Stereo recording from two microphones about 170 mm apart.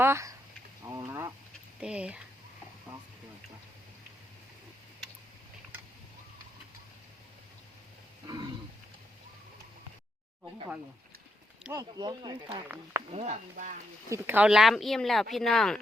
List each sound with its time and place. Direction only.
0.0 s a sound: 15° right (ahead or behind)
1.8 s speech: 5° right (ahead or behind)
11.7 s speech: 25° right (ahead or behind)
12.6 s speech: 10° right (ahead or behind)
13.1 s speech: 40° right (ahead or behind)
14.1 s speech: 10° right (ahead or behind)